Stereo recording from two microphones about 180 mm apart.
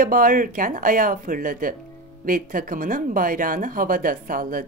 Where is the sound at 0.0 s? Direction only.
50° right (ahead or behind).